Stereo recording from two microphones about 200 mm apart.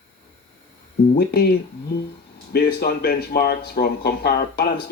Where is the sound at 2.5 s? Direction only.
50° left (ahead or behind).